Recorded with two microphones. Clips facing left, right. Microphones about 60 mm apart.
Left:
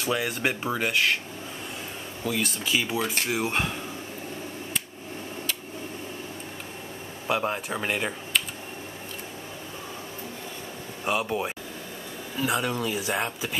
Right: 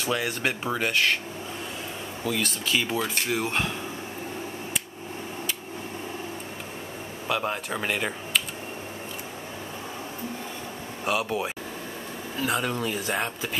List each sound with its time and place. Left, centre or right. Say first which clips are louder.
0.0 s speech: even; centre
2.2 s speech: even; centre
7.4 s speech: even; centre
11.1 s speech: even; centre